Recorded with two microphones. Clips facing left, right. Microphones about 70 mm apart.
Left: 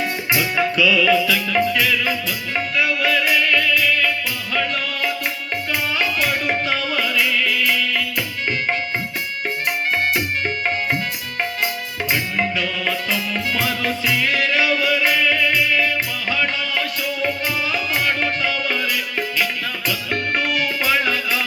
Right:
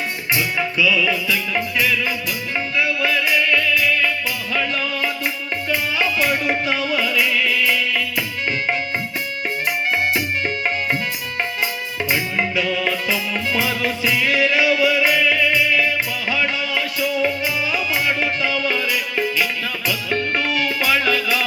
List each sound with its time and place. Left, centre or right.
0.3 s music: left
3.1 s music: left
6.0 s music: left
7.1 s music: right
14.3 s music: left
19.9 s music: left
20.9 s music: left